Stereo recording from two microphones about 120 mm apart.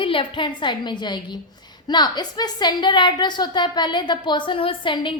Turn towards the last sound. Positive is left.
turn(degrees=45)  # may be behind; listen again after turning